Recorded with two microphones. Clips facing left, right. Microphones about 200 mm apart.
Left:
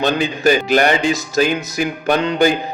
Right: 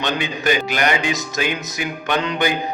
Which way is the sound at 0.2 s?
40° left (ahead or behind).